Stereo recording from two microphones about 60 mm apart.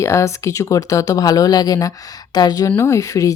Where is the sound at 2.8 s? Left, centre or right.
Left.